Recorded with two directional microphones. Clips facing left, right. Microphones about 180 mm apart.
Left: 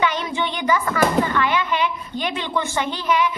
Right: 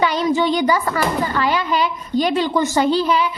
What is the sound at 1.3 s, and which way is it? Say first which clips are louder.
A woman's voice: right 2 dB; 35° right (ahead or behind).